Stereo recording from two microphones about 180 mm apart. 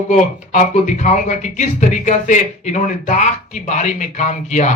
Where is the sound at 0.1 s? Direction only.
40° left (ahead or behind).